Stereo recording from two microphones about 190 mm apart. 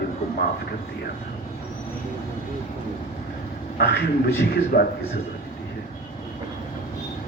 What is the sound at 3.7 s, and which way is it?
A man's voice, 60° left (ahead or behind).